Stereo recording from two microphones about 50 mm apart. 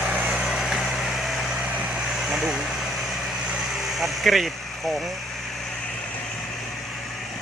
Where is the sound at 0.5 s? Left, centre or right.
Centre.